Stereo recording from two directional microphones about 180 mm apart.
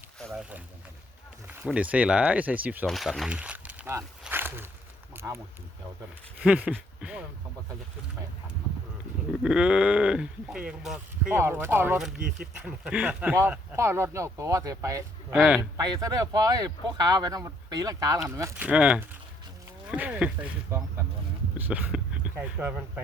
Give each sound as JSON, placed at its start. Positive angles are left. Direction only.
{"t": 0.2, "sound": "speech", "side_deg": 0}
{"t": 2.8, "sound": "a sound", "side_deg": 0}
{"t": 6.4, "sound": "a sound", "side_deg": -5}
{"t": 9.4, "sound": "speech", "side_deg": -5}
{"t": 15.4, "sound": "speech", "side_deg": 0}
{"t": 15.8, "sound": "speech", "side_deg": -20}